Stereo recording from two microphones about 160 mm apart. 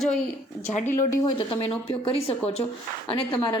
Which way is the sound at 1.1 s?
30° left (ahead or behind).